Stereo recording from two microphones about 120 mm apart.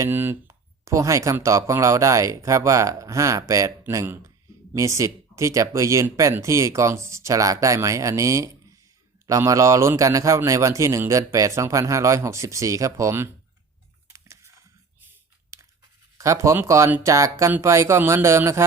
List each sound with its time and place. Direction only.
0.0 s speech: 15° right (ahead or behind)
14.1 s a sound: 25° right (ahead or behind)
16.1 s speech: 25° right (ahead or behind)